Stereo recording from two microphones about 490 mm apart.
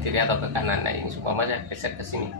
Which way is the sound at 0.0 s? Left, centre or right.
Right.